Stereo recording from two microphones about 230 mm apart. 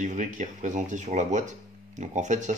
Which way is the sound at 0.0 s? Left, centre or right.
Right.